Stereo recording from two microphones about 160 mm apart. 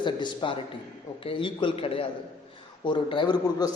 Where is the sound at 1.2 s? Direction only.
35° left (ahead or behind).